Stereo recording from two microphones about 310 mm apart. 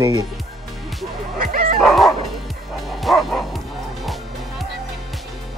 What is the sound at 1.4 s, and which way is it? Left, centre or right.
Bow-wow, right.